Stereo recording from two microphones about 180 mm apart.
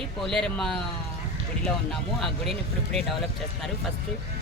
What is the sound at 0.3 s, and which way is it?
Speech, 5° left (ahead or behind).